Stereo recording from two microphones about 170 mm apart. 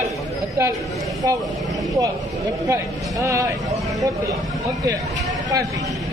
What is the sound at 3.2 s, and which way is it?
Speech, 20° right (ahead or behind).